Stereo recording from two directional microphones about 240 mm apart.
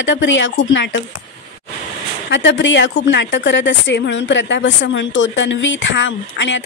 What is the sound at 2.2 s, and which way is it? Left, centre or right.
A woman's voice, left.